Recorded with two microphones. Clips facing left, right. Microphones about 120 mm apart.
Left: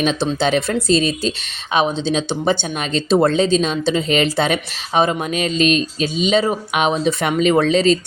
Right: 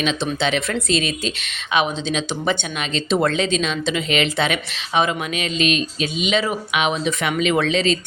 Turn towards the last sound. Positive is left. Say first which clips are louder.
# left 5 dB
turn(degrees=40)  # may be behind; listen again after turning